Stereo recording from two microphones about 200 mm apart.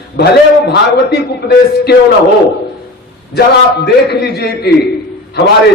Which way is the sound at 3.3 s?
55° left (ahead or behind).